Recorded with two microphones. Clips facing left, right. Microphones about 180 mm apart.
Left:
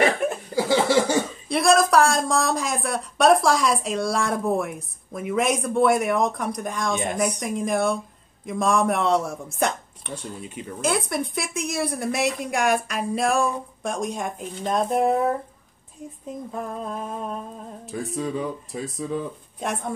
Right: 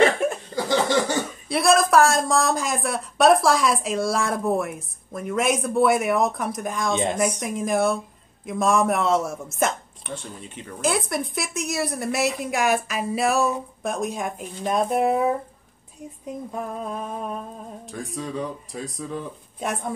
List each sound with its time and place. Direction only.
0.2 s speech: 5° left (ahead or behind)
6.9 s speech: 20° right (ahead or behind)
7.2 s speech: centre (ahead or behind)
16.5 s speech: 5° right (ahead or behind)